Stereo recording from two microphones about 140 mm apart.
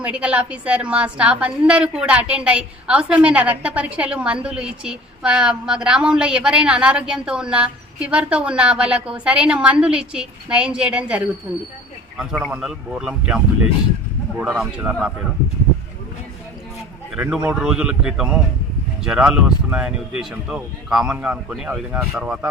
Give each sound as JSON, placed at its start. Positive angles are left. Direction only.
{"t": 0.0, "sound": "a woman's voice", "side_deg": -10}
{"t": 14.4, "sound": "speech", "side_deg": 0}
{"t": 17.2, "sound": "speech", "side_deg": -10}